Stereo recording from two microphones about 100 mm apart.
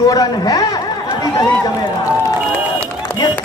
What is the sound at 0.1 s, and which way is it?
Speech, 35° left (ahead or behind).